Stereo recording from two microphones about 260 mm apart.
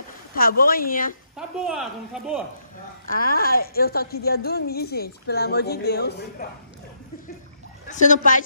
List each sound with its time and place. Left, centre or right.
0.3 s a woman's voice: left
1.3 s speech: centre
3.2 s a woman's voice: left
7.9 s speech: left